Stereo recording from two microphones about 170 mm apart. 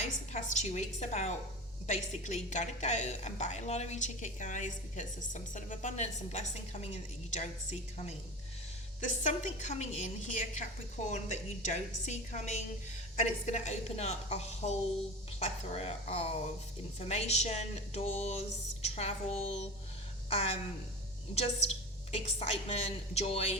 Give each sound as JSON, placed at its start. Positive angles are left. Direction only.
{"t": 0.0, "sound": "a woman's voice", "side_deg": 45}